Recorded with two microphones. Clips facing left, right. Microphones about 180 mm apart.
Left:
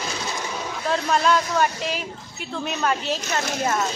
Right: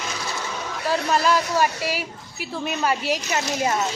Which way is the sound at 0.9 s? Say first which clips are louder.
Even; 5° right (ahead or behind).